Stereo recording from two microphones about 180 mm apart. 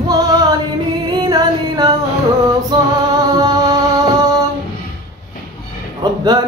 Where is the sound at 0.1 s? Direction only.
20° right (ahead or behind).